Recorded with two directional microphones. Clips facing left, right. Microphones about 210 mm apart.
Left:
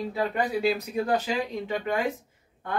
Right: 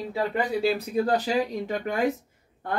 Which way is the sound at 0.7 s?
35° right (ahead or behind).